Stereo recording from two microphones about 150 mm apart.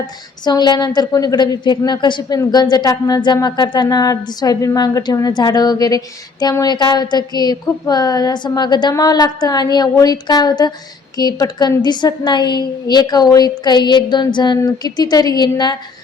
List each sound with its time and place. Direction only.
0.4 s a woman's voice: 30° left (ahead or behind)